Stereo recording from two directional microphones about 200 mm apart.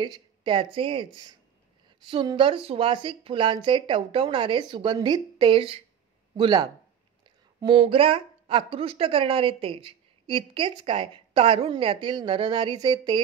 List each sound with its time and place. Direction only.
0.0 s a woman's voice: 20° right (ahead or behind)